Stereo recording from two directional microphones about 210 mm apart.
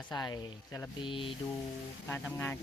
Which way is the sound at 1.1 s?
25° left (ahead or behind).